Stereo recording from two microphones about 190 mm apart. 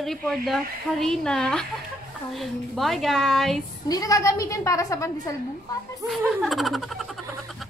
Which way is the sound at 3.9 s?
20° left (ahead or behind).